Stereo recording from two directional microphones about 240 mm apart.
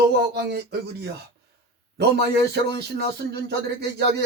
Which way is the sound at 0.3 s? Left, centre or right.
Right.